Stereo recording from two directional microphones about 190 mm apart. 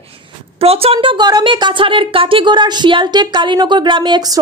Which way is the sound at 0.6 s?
30° right (ahead or behind).